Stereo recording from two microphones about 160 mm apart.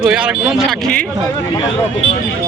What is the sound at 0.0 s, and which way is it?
Speech, 5° right (ahead or behind).